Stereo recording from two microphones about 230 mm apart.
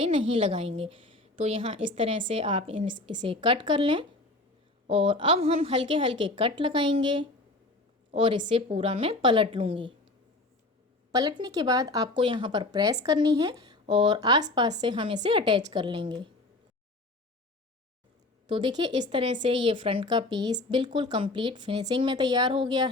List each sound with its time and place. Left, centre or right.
0.0 s a woman's voice: right
11.1 s a woman's voice: centre
18.4 s a woman's voice: centre